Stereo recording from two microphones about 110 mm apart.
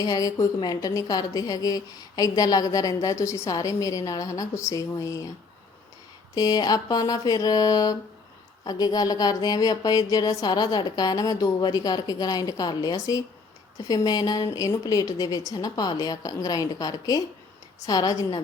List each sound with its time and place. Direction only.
0.0 s a woman's voice: 35° left (ahead or behind)
6.3 s a woman's voice: 35° left (ahead or behind)